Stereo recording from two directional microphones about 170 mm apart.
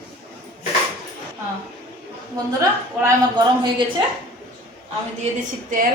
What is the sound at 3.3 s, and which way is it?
Speech, 25° right (ahead or behind).